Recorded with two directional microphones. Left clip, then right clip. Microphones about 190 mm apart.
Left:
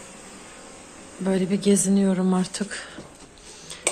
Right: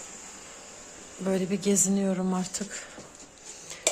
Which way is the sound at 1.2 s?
10° right (ahead or behind).